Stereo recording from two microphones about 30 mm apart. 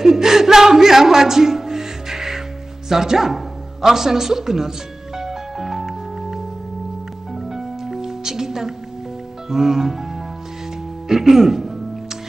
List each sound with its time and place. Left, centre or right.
0.0 s music: centre
11.1 s music: centre